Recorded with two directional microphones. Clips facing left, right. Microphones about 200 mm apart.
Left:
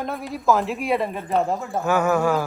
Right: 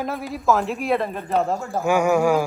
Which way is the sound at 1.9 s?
10° right (ahead or behind).